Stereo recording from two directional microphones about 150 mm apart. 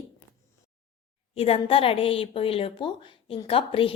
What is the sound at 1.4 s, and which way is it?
A woman's voice, 40° left (ahead or behind).